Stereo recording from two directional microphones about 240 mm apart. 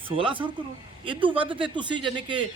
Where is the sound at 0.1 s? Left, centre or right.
Right.